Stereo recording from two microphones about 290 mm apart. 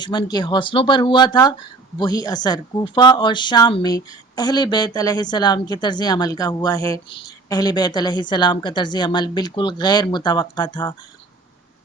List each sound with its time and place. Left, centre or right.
0.0 s speech: centre